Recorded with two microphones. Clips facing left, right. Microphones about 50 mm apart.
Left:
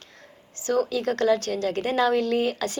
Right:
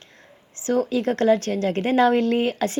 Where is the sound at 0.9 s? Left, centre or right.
Right.